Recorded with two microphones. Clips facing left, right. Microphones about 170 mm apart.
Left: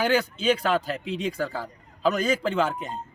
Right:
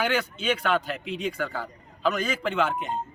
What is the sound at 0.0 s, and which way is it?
Speech, 35° left (ahead or behind).